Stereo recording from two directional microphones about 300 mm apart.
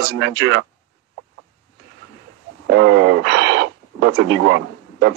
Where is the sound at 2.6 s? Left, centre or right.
Right.